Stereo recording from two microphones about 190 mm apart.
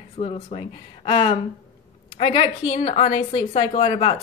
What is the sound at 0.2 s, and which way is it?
A woman's voice, 30° left (ahead or behind).